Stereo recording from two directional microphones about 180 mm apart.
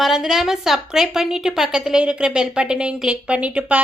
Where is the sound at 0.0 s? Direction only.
5° right (ahead or behind).